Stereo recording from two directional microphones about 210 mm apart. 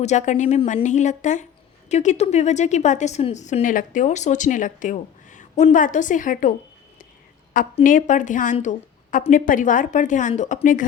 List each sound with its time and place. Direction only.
0.0 s a woman's voice: 35° left (ahead or behind)
7.5 s a woman's voice: 40° left (ahead or behind)